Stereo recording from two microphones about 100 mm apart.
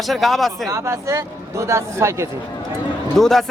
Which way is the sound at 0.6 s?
30° right (ahead or behind).